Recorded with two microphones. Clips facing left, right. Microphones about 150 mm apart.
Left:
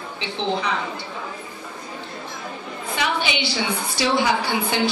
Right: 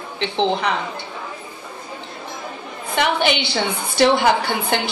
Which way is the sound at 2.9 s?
60° right (ahead or behind).